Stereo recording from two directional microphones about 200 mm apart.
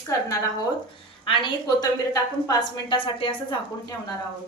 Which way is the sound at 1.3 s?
20° left (ahead or behind).